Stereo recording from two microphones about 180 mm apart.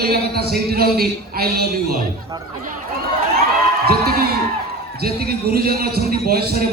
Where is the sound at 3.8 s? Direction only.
60° right (ahead or behind).